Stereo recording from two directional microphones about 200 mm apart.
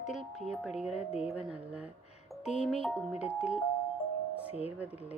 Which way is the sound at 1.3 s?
5° right (ahead or behind).